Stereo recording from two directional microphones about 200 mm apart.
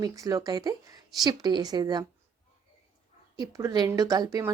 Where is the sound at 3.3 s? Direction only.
15° right (ahead or behind).